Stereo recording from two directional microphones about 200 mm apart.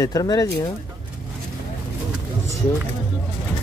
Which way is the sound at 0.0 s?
20° left (ahead or behind).